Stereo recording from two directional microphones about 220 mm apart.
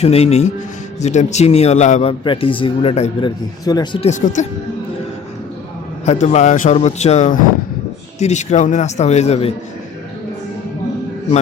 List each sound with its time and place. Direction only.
0.0 s a man's voice: 30° left (ahead or behind)
6.1 s speech: 30° left (ahead or behind)